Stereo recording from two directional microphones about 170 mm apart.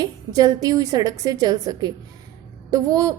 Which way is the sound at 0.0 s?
20° right (ahead or behind).